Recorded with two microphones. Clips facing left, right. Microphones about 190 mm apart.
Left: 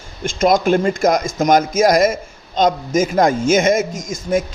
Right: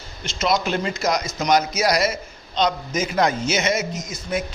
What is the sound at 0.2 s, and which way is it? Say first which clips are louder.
A man's voice: left 7 dB; 50° left (ahead or behind).